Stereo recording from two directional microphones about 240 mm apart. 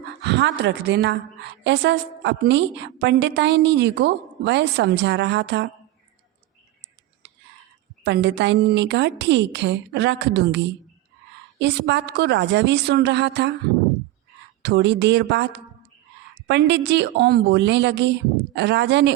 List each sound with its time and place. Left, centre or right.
0.0 s a woman's voice: right
8.0 s a woman's voice: right
14.6 s a woman's voice: right